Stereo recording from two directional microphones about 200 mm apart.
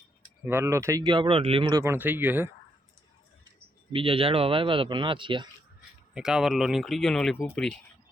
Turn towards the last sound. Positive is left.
turn(degrees=5)  # may be behind; listen again after turning